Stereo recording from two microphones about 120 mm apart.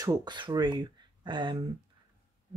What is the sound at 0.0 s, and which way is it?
Speech, 35° right (ahead or behind).